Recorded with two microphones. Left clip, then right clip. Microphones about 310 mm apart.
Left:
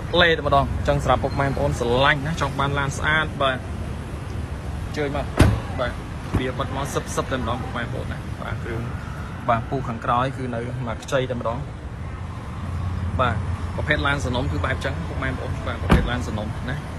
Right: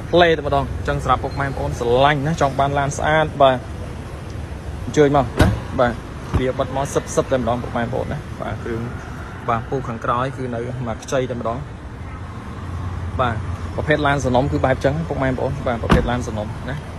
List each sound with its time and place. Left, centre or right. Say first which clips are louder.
0.1 s speech: right 3 dB; centre
4.9 s speech: right 9 dB; right
10.0 s speech: even; centre
13.2 s speech: right 2 dB; centre